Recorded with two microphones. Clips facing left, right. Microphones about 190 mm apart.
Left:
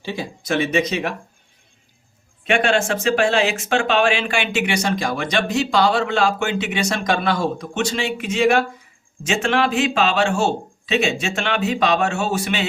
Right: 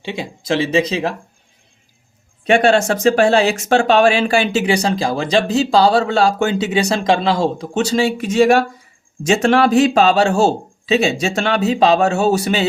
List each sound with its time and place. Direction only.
0.0 s speech: 25° right (ahead or behind)
2.5 s speech: 40° right (ahead or behind)